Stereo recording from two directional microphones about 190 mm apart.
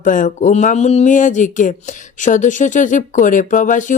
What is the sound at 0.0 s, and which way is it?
Speech, 45° left (ahead or behind).